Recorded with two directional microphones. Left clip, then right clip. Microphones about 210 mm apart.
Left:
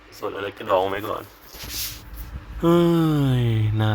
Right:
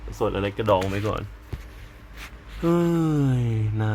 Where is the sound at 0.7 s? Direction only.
25° left (ahead or behind).